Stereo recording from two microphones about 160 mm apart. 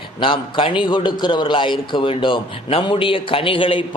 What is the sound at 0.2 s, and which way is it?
A man's voice, 30° left (ahead or behind).